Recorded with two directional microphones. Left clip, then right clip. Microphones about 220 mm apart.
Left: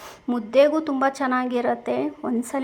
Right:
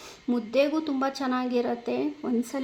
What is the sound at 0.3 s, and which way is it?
Speech, 10° left (ahead or behind).